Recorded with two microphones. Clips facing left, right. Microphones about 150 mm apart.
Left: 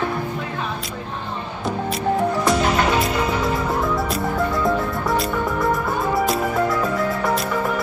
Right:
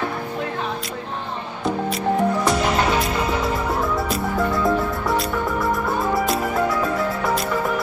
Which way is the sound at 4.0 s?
Centre (ahead or behind).